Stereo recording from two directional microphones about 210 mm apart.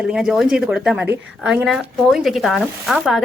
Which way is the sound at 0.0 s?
5° right (ahead or behind).